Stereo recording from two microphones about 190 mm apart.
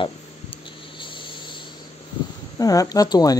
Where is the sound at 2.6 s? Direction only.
20° left (ahead or behind).